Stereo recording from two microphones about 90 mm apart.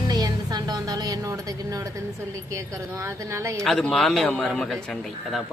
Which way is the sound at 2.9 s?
30° right (ahead or behind).